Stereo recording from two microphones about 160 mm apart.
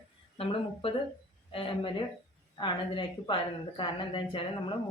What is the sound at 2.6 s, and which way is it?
A woman's voice, 30° left (ahead or behind).